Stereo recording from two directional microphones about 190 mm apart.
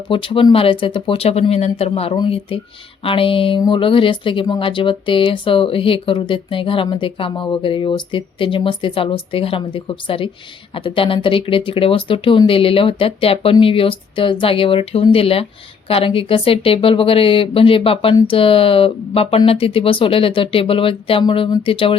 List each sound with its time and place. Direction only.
0.1 s speech: 25° left (ahead or behind)